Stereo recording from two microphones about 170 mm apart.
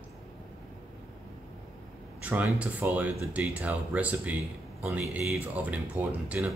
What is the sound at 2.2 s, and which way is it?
Speech, 10° right (ahead or behind).